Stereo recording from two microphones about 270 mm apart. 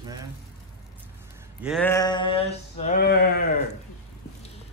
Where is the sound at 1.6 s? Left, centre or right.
Centre.